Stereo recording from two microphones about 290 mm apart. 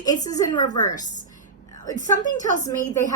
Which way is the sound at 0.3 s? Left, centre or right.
Centre.